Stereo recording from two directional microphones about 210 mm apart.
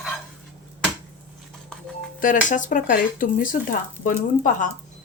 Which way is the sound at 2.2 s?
40° left (ahead or behind).